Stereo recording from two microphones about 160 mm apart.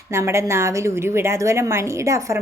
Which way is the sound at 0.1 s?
15° right (ahead or behind).